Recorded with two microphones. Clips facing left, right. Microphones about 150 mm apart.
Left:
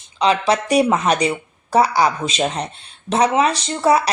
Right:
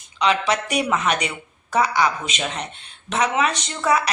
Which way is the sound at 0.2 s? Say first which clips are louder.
Left 4 dB; 35° left (ahead or behind).